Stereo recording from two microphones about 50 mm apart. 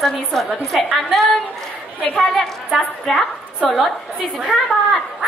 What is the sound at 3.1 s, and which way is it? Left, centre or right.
Speech, centre.